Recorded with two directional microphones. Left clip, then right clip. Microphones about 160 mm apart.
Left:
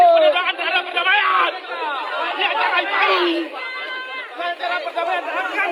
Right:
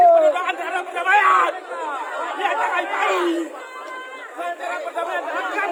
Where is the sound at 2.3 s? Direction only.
10° right (ahead or behind).